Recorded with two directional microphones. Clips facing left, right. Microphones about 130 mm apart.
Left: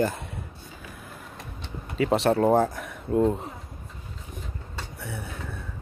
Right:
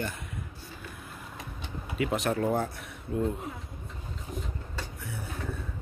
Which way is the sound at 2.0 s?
35° left (ahead or behind).